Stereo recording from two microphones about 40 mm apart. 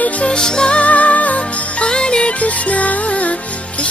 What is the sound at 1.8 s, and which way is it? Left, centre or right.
Music, left.